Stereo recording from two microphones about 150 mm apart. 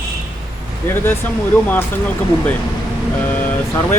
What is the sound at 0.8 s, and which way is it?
Speech, 15° left (ahead or behind).